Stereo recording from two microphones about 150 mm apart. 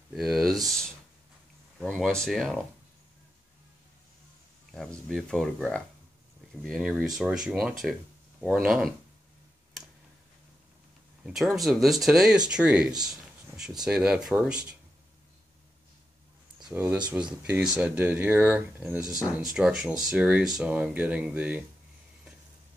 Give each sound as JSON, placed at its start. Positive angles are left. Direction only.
{"t": 0.1, "sound": "speech", "side_deg": 0}
{"t": 4.7, "sound": "speech", "side_deg": 0}
{"t": 11.2, "sound": "speech", "side_deg": 0}
{"t": 16.7, "sound": "speech", "side_deg": -15}
{"t": 19.1, "sound": "speech", "side_deg": -5}